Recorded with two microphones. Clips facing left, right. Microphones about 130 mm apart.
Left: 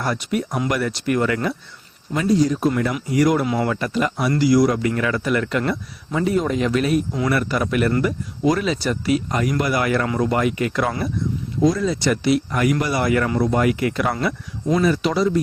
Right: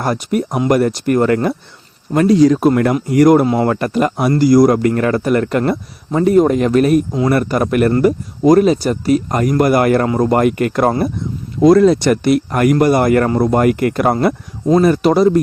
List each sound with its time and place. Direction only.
0.0 s a man's voice: 45° right (ahead or behind)
2.2 s speech: 90° right
2.6 s a man's voice: 60° right (ahead or behind); by 3.7 s 35° right (ahead or behind)
3.7 s a man's voice: 50° right (ahead or behind)
11.6 s a man's voice: 65° right (ahead or behind); by 15.4 s 50° right (ahead or behind)